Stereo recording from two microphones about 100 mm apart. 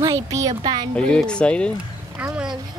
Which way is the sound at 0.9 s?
10° left (ahead or behind).